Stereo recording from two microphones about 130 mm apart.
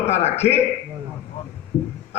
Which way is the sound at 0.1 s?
55° left (ahead or behind).